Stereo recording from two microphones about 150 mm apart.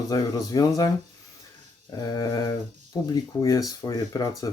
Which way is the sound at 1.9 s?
25° left (ahead or behind).